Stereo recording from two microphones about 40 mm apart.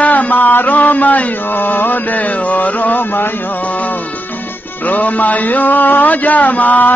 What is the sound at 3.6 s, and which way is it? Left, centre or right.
Music, left.